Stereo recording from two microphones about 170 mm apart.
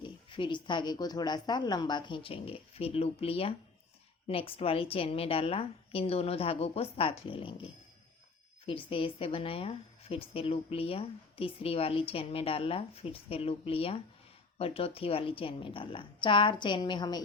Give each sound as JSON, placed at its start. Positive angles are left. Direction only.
{"t": 0.0, "sound": "a woman's voice", "side_deg": 30}